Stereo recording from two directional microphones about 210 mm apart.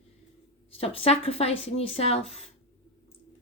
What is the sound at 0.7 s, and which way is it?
Speech, 25° left (ahead or behind).